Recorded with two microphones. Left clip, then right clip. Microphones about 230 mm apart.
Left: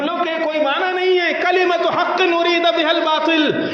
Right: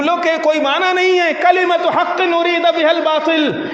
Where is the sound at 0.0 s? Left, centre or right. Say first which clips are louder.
Right 5 dB; right.